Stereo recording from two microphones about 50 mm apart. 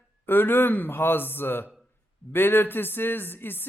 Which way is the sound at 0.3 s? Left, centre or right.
Left.